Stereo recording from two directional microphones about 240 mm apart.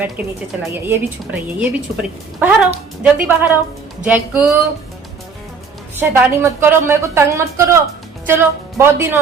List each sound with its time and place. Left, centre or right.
0.2 s a woman's voice: centre
6.0 s speech: centre